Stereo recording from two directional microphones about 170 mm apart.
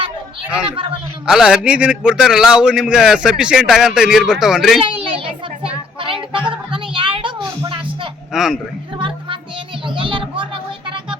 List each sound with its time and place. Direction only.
1.3 s a man's voice: 5° right (ahead or behind)
4.8 s child singing: 30° right (ahead or behind)
8.3 s speech: 5° right (ahead or behind)
9.0 s music: 30° right (ahead or behind)
9.8 s a child's voice: 30° right (ahead or behind)